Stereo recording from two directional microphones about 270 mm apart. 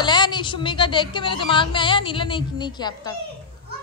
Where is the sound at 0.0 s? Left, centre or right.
Centre.